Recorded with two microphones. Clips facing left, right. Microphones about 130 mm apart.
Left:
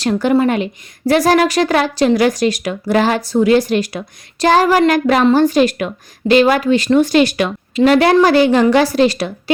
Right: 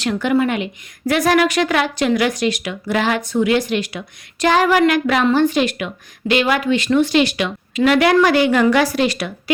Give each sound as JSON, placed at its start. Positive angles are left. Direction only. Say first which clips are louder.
{"t": 0.0, "sound": "a woman's voice", "louder": "left 4 dB", "side_deg": 35}
{"t": 7.8, "sound": "a woman's voice", "louder": "left 3 dB", "side_deg": 35}